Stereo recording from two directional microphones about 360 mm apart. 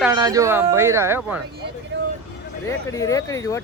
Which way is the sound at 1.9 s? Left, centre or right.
Right.